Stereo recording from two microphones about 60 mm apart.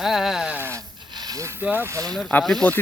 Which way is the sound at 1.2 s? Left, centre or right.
Right.